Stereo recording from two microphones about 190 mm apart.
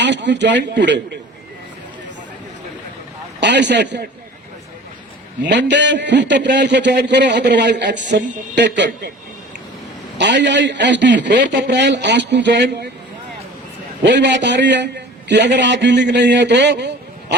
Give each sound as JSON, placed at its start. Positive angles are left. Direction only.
{"t": 0.0, "sound": "a man's voice", "side_deg": -65}
{"t": 3.4, "sound": "speech", "side_deg": -65}
{"t": 5.5, "sound": "a man's voice", "side_deg": -65}
{"t": 10.2, "sound": "a man's voice", "side_deg": -65}
{"t": 14.0, "sound": "a man's voice", "side_deg": -65}